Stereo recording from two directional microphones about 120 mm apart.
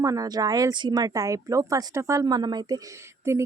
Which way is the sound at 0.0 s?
30° right (ahead or behind).